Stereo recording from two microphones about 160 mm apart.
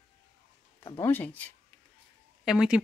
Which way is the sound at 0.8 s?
20° left (ahead or behind).